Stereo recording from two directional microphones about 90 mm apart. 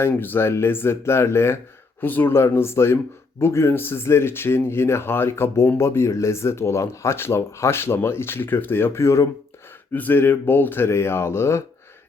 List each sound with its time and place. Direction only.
0.0 s speech: 25° left (ahead or behind)
9.9 s speech: 20° left (ahead or behind)